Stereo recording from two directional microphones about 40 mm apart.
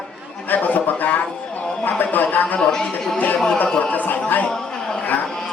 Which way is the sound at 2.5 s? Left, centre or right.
Centre.